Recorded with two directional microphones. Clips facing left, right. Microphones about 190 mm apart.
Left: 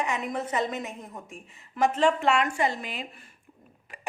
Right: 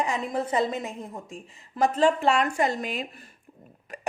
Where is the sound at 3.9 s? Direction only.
40° right (ahead or behind).